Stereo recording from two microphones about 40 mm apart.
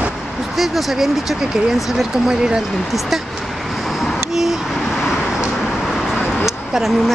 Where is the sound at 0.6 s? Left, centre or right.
Centre.